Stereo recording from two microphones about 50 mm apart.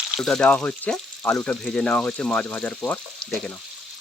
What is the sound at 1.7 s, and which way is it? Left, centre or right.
Speech, left.